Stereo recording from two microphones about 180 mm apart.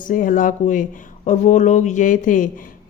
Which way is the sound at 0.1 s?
45° left (ahead or behind).